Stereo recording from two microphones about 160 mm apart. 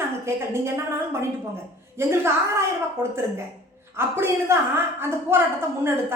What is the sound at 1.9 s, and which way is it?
A woman's voice, 15° right (ahead or behind).